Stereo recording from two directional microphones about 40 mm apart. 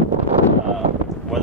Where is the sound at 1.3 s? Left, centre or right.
Centre.